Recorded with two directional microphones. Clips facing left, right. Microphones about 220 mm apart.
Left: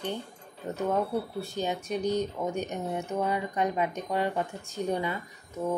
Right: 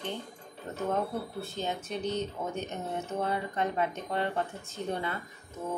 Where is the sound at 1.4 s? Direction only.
15° left (ahead or behind).